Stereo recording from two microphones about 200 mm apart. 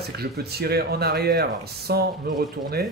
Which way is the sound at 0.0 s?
50° right (ahead or behind).